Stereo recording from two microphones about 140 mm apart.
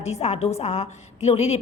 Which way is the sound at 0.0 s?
50° left (ahead or behind).